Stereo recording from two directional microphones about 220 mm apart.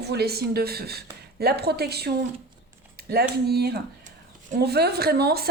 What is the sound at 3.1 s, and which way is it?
A woman's voice, 45° right (ahead or behind).